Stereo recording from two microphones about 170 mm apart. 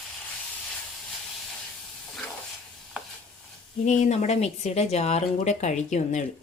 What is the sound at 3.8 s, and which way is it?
Speech, 40° left (ahead or behind).